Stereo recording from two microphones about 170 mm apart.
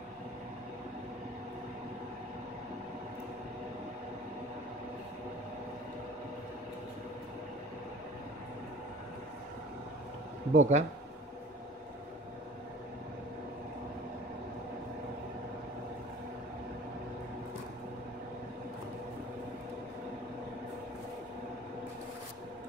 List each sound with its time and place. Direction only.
10.5 s speech: 45° right (ahead or behind)